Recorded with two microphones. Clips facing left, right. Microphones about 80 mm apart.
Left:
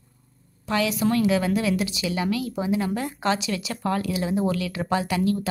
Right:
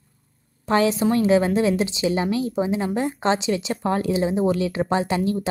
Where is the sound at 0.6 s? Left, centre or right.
Right.